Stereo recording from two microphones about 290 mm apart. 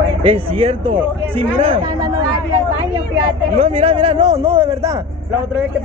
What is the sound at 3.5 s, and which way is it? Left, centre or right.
Speech, right.